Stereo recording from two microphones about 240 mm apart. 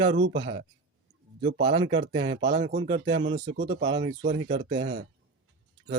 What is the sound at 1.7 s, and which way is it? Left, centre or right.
Speech, centre.